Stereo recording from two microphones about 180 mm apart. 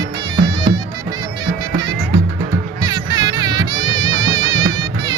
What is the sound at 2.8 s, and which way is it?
Music, 20° right (ahead or behind).